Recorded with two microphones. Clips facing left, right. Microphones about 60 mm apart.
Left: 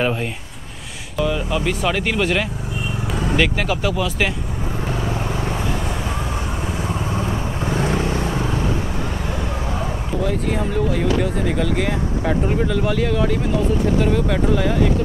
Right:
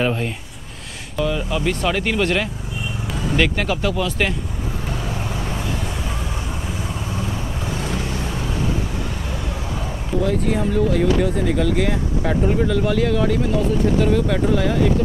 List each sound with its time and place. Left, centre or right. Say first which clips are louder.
0.0 s speech: even; centre
4.8 s vehicle: left 4 dB; centre
6.9 s vehicle: left 4 dB; left
10.2 s speech: right 2 dB; centre